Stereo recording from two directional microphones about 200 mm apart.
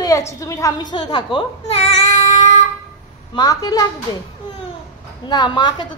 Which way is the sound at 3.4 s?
20° left (ahead or behind).